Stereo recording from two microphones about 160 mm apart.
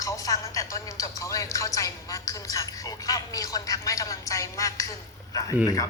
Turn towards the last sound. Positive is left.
turn(degrees=20)  # may be behind; listen again after turning